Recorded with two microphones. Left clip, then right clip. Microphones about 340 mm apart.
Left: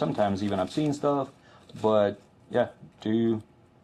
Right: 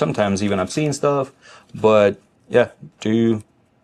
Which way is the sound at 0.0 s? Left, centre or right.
Right.